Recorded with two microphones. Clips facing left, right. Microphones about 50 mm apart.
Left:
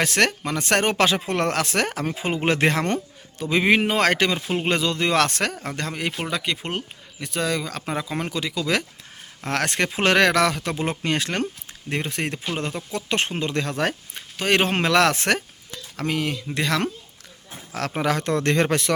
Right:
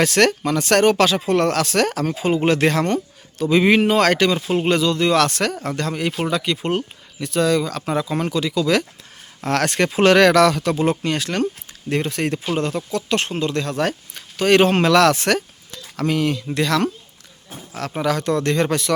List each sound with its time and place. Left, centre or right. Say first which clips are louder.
0.0 s speech: right 5 dB; centre; by 3.0 s left
3.3 s speech: right 4 dB; centre
4.7 s speech: right 4 dB; left
5.6 s speech: right 5 dB; centre
11.0 s speech: right 2 dB; left
11.9 s speech: right 5 dB; centre
13.0 s speech: right 2 dB; left
14.3 s speech: right 6 dB; centre
14.9 s speech: right 4 dB; left
16.0 s speech: right 5 dB; centre
17.9 s speech: right 3 dB; left